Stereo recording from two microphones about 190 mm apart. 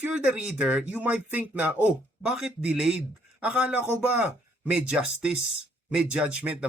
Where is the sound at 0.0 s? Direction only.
5° right (ahead or behind).